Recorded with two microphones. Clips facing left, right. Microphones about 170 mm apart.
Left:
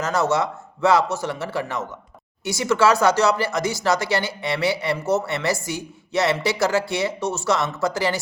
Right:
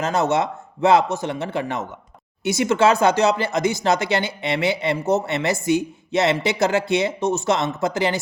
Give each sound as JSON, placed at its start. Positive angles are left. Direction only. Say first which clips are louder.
{"t": 0.0, "sound": "speech", "louder": "right 1 dB", "side_deg": -20}